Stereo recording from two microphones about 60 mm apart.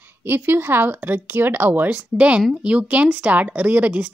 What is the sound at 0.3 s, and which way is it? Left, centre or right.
Speech, right.